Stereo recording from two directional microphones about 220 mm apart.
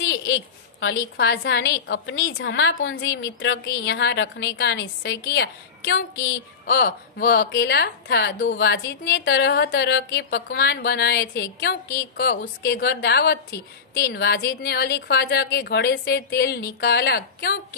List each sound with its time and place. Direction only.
0.0 s a woman's voice: 60° left (ahead or behind)
6.6 s a woman's voice: 45° left (ahead or behind)